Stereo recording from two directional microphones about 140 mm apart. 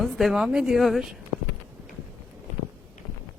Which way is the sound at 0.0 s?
Centre (ahead or behind).